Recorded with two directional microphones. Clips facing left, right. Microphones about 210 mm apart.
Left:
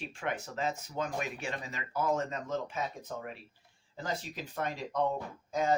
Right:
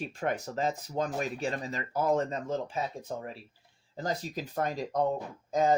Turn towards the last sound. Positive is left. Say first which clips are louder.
# right 4 dB
turn(degrees=-35)  # may be behind; listen again after turning